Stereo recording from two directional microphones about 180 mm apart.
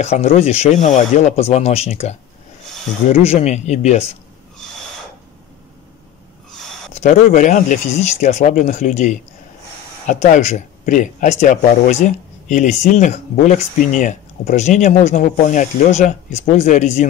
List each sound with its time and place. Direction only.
0.0 s speech: 35° left (ahead or behind)
6.9 s speech: 40° left (ahead or behind)